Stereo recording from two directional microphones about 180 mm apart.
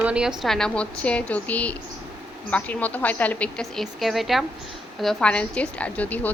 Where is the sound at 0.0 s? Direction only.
5° right (ahead or behind).